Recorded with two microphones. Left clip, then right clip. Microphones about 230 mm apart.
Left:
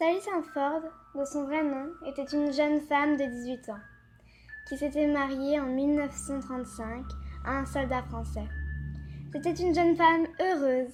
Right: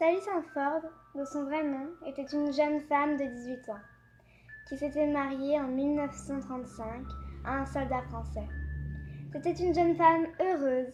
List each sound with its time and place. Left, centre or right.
0.3 s a woman's voice: left